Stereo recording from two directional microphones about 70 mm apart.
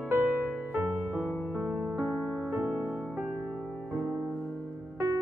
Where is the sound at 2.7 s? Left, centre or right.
Centre.